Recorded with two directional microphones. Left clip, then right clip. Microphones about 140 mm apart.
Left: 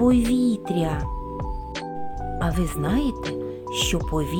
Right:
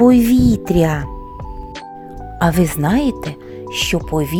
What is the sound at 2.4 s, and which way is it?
Speech, 55° right (ahead or behind).